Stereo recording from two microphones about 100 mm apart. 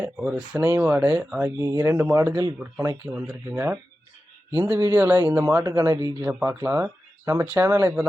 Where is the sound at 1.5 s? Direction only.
30° right (ahead or behind).